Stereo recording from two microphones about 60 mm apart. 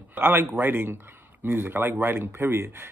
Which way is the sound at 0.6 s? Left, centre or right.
Right.